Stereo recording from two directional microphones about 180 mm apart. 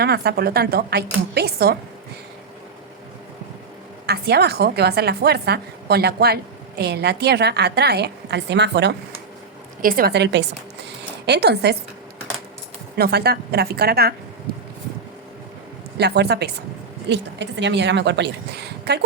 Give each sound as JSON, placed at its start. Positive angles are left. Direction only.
{"t": 0.0, "sound": "a woman's voice", "side_deg": -60}
{"t": 4.0, "sound": "a woman's voice", "side_deg": -65}
{"t": 9.8, "sound": "a woman's voice", "side_deg": -55}
{"t": 13.0, "sound": "a woman's voice", "side_deg": -65}
{"t": 14.5, "sound": "a sound", "side_deg": -55}
{"t": 16.0, "sound": "a woman's voice", "side_deg": -65}